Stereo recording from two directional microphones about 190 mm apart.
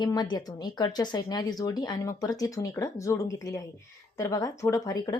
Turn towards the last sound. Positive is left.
turn(degrees=20)  # may be behind; listen again after turning